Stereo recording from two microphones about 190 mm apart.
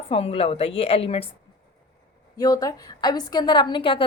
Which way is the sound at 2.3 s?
20° left (ahead or behind).